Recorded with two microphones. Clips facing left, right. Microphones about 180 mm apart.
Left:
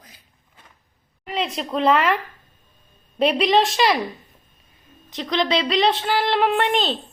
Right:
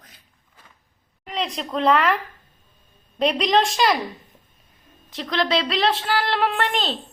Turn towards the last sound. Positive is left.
turn(degrees=0)  # may be behind; listen again after turning